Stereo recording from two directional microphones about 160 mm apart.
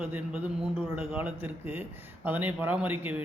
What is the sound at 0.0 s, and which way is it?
A man's voice, 10° right (ahead or behind).